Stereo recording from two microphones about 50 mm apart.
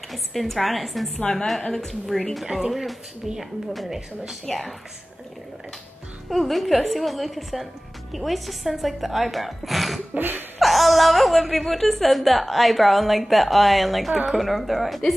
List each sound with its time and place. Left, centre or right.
0.1 s a woman's voice: centre
2.4 s a woman's voice: centre
2.7 s a woman's voice: centre
6.3 s a woman's voice: centre
10.1 s a sound: right
10.6 s a woman's voice: centre